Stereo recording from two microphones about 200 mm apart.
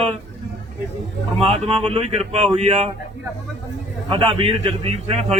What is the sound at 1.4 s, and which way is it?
Speech, 30° right (ahead or behind).